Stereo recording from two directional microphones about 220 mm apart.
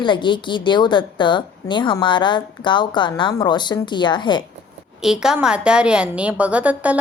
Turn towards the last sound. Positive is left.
turn(degrees=-5)  # may be behind; listen again after turning